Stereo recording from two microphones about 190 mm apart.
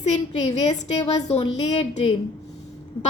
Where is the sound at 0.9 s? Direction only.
30° left (ahead or behind).